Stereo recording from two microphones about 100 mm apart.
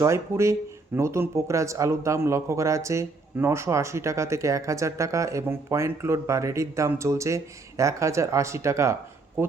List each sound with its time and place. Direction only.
0.0 s a man's voice: 30° right (ahead or behind)